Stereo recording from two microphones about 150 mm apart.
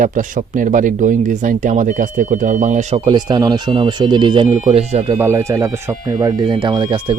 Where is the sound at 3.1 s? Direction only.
30° right (ahead or behind).